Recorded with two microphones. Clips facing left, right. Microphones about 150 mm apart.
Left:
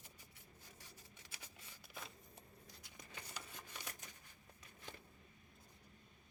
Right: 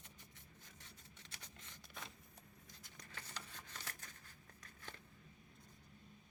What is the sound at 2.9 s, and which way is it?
Scissors, 10° left (ahead or behind).